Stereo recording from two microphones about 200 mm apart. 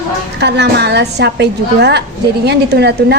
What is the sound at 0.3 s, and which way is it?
A woman's voice, 60° right (ahead or behind).